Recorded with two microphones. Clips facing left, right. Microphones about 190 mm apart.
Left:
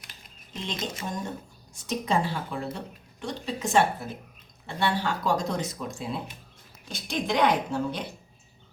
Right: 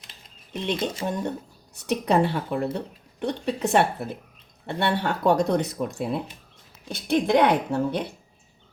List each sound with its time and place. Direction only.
0.5 s a woman's voice: 65° right (ahead or behind)